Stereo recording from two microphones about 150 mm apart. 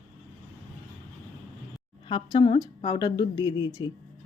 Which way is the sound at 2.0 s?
30° left (ahead or behind).